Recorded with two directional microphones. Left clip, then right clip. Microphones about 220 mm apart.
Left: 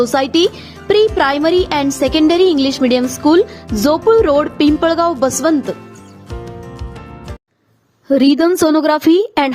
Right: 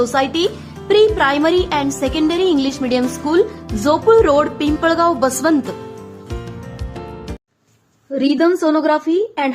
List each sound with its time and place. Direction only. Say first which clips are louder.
0.0 s a woman's voice: left 3 dB; 30° left (ahead or behind)
8.1 s a woman's voice: left 4 dB; 50° left (ahead or behind)